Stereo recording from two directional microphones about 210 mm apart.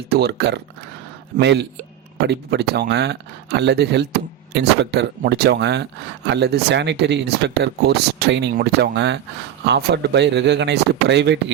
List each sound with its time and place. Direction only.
0.1 s speech: 50° right (ahead or behind)